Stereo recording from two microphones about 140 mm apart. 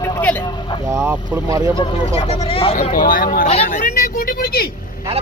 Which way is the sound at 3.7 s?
75° left (ahead or behind).